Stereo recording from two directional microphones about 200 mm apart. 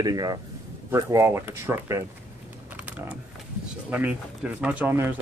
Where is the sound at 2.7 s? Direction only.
5° right (ahead or behind).